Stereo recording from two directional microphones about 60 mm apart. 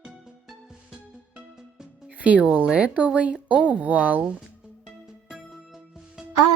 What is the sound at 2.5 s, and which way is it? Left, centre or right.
Speech, right.